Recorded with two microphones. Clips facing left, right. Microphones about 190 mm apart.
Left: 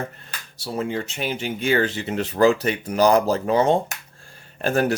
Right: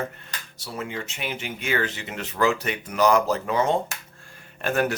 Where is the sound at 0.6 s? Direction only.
35° left (ahead or behind).